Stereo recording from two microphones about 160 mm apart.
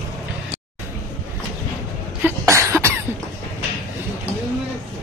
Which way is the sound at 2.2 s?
15° right (ahead or behind).